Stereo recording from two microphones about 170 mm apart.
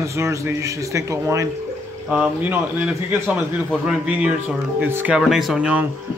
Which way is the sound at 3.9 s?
5° right (ahead or behind).